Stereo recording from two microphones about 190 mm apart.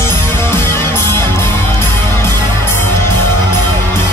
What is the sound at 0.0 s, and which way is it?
Music, 15° left (ahead or behind).